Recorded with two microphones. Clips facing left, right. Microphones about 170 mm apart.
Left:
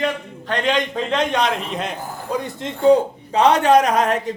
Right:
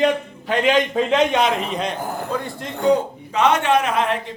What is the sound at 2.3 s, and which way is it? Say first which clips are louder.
Speech: left 1 dB; 20° left (ahead or behind).